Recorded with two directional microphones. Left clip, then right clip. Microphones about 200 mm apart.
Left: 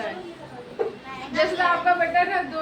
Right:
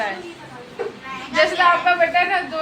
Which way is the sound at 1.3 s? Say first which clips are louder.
Right 6 dB; centre (ahead or behind).